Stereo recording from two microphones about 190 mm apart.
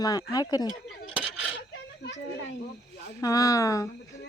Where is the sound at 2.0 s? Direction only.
65° left (ahead or behind).